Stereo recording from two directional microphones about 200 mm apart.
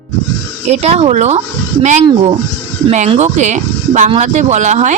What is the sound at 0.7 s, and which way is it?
Speech, 30° right (ahead or behind).